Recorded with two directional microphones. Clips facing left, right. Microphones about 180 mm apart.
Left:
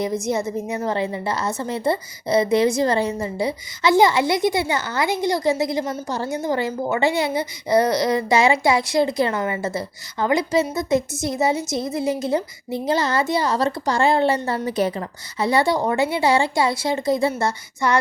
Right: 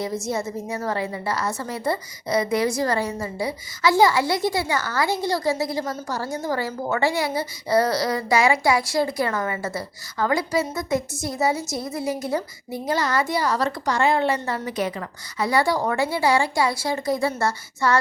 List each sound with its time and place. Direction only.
0.0 s speech: 20° left (ahead or behind)